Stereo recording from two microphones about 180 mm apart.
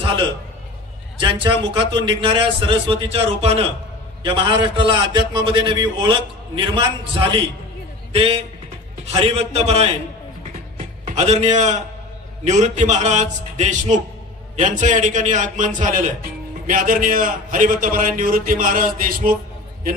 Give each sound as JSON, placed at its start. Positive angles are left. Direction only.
{"t": 0.0, "sound": "a sound", "side_deg": -30}
{"t": 1.1, "sound": "a man's voice", "side_deg": -25}
{"t": 11.1, "sound": "a man's voice", "side_deg": -40}